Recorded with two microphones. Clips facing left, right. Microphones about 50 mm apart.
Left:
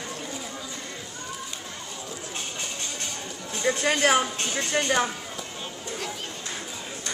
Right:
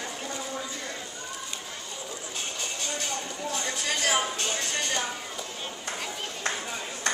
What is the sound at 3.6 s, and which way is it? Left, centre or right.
Speech, left.